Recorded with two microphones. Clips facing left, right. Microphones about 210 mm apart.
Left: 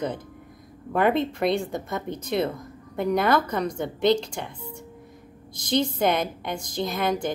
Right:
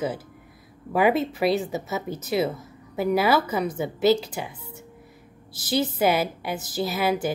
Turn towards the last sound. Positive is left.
turn(degrees=-5)  # may be behind; listen again after turning